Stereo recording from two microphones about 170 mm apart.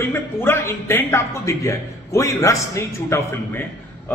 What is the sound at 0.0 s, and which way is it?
Speech, 15° left (ahead or behind).